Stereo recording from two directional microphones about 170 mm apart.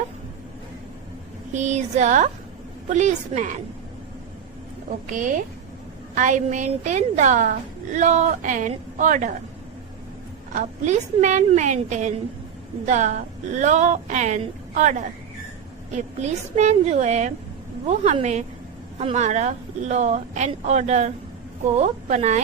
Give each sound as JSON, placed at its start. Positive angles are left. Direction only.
{"t": 1.5, "sound": "a woman's voice", "side_deg": -45}
{"t": 5.1, "sound": "a woman's voice", "side_deg": -50}
{"t": 10.5, "sound": "a woman's voice", "side_deg": -45}